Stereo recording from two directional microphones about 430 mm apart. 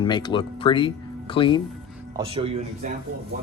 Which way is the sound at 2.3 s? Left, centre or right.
Centre.